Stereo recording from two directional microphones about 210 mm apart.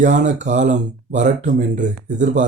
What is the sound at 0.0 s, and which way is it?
Speech, 35° right (ahead or behind).